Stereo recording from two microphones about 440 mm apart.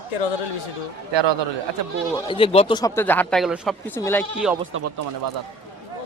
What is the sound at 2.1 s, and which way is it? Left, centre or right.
Speech, centre.